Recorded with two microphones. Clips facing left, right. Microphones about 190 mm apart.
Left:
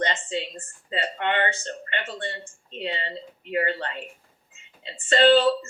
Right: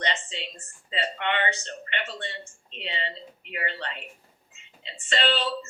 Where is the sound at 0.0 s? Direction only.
45° left (ahead or behind).